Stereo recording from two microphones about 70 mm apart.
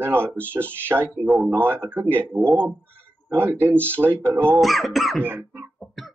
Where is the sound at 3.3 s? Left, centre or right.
Right.